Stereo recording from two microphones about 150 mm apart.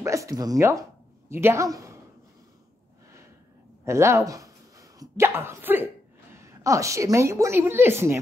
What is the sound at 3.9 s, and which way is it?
A woman's voice, 20° right (ahead or behind).